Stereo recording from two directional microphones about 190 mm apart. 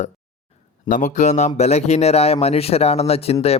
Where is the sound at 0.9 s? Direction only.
40° left (ahead or behind).